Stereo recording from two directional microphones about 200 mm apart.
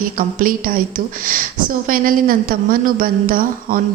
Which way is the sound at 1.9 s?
45° right (ahead or behind).